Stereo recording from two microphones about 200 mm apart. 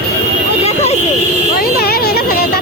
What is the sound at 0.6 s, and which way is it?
Vehicle, 30° left (ahead or behind).